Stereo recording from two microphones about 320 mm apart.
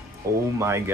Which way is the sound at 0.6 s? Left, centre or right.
Centre.